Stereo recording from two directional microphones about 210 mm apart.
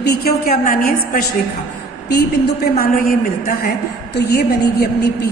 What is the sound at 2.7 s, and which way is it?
A woman's voice, 45° left (ahead or behind).